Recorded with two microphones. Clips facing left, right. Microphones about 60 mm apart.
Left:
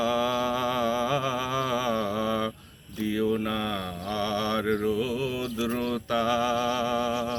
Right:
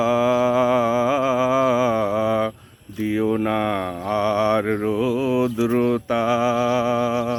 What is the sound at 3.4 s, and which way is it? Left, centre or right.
Speech, right.